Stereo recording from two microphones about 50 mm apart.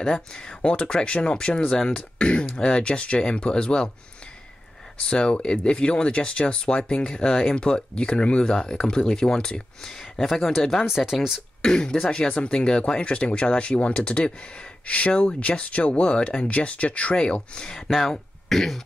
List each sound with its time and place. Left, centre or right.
0.3 s speech: centre
5.0 s speech: centre
7.5 s speech: centre
11.6 s speech: centre
17.8 s speech: centre
18.5 s cough: centre